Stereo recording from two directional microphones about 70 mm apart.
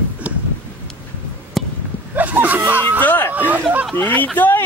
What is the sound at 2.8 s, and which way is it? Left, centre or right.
Speech, left.